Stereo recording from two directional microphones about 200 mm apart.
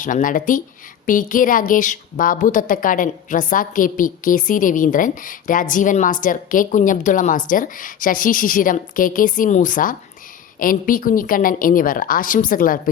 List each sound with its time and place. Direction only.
0.0 s a woman's voice: 40° left (ahead or behind)